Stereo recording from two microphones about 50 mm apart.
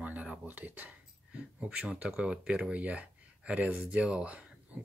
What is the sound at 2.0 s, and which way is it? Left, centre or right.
Speech, centre.